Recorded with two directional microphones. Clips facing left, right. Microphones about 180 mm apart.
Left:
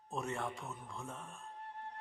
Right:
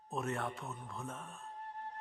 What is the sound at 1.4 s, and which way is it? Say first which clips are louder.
Music: right 2 dB; 40° right (ahead or behind).